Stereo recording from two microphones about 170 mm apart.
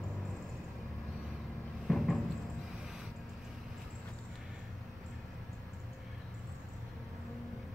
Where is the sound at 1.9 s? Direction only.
Centre (ahead or behind).